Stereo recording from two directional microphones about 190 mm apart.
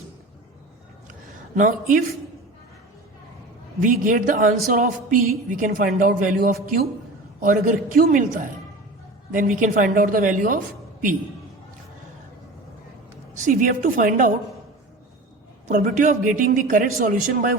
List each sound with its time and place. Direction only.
1.5 s speech: 45° right (ahead or behind)
3.8 s speech: 45° right (ahead or behind)
13.4 s speech: 45° right (ahead or behind)
15.7 s speech: 40° right (ahead or behind)